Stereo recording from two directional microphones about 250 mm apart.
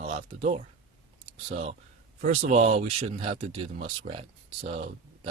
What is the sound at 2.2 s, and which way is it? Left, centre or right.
Speech, right.